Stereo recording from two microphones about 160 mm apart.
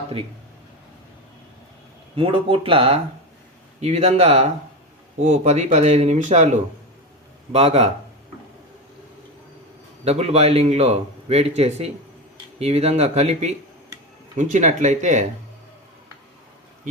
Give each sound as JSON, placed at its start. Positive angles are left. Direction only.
{"t": 2.1, "sound": "a man's voice", "side_deg": -35}
{"t": 10.0, "sound": "a man's voice", "side_deg": -40}